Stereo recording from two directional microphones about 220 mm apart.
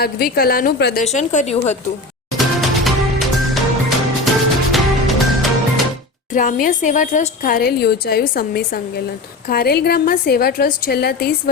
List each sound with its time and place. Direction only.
0.0 s a woman's voice: 45° left (ahead or behind)
1.0 s a woman's voice: 30° left (ahead or behind)
2.6 s music: centre (ahead or behind)
6.3 s a woman's voice: 35° left (ahead or behind)